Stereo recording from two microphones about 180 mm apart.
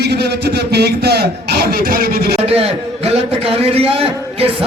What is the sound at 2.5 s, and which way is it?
A man's voice, 35° right (ahead or behind).